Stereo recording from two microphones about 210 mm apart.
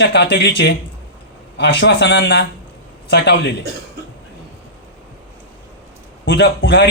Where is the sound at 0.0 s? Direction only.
55° left (ahead or behind).